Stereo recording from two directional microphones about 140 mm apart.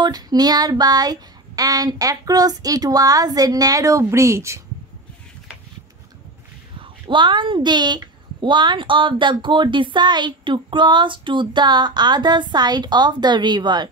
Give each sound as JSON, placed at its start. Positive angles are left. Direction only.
{"t": 0.0, "sound": "child singing", "side_deg": -30}
{"t": 6.8, "sound": "a woman's voice", "side_deg": -35}